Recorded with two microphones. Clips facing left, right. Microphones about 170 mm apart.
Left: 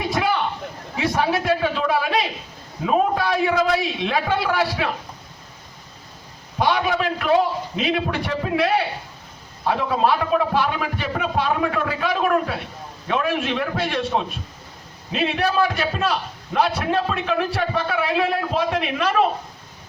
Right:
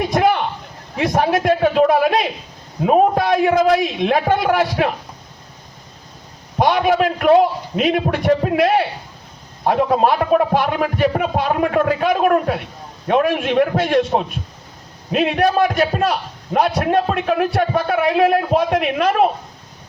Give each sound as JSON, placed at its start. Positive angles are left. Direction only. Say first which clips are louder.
{"t": 0.1, "sound": "a sound", "louder": "right 5 dB", "side_deg": -50}
{"t": 2.8, "sound": "a man's voice", "louder": "right 5 dB", "side_deg": -50}
{"t": 6.6, "sound": "a man's voice", "louder": "right 5 dB", "side_deg": -55}